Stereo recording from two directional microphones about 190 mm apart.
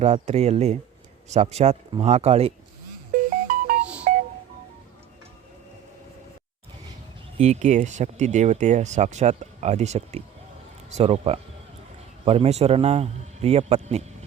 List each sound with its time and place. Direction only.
0.0 s speech: 35° right (ahead or behind)
3.4 s music: 45° right (ahead or behind)
4.1 s a sound: 50° right (ahead or behind)
7.3 s speech: 35° right (ahead or behind)